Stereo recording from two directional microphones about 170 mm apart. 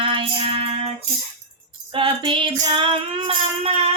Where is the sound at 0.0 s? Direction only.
30° right (ahead or behind).